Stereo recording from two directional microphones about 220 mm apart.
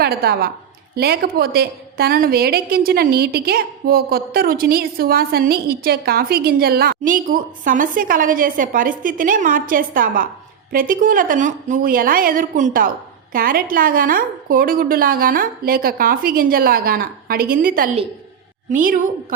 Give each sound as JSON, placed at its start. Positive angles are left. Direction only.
{"t": 0.0, "sound": "a woman's voice", "side_deg": -45}